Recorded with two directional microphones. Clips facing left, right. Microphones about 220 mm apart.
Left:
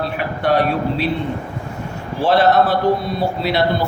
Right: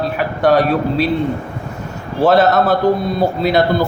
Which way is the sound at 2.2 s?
40° right (ahead or behind).